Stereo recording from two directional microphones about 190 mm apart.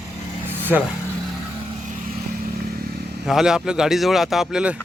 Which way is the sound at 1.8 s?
45° right (ahead or behind).